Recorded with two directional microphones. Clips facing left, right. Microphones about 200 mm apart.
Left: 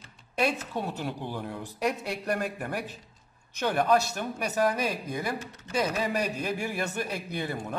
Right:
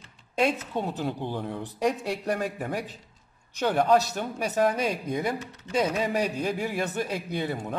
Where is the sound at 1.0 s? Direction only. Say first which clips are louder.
Right 3 dB; 20° right (ahead or behind).